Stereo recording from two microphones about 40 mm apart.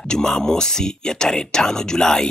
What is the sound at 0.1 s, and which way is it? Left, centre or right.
Speech, centre.